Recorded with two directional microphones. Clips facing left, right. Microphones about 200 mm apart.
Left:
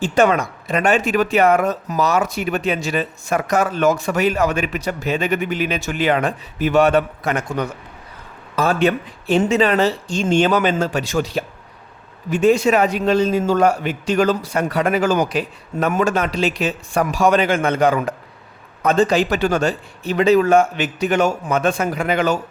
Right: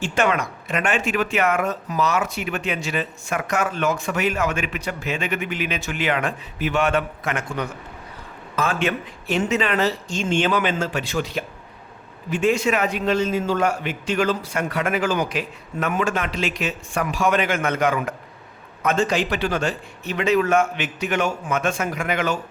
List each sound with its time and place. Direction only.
0.0 s speech: 35° left (ahead or behind)